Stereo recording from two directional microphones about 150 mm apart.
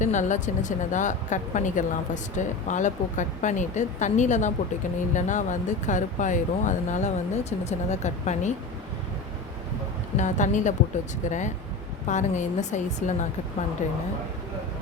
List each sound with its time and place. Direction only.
0.0 s a woman's voice: 55° left (ahead or behind)
10.2 s a woman's voice: 55° left (ahead or behind)